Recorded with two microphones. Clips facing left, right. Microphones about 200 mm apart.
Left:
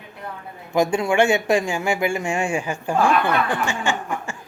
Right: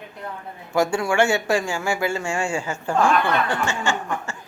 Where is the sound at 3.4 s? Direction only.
15° left (ahead or behind).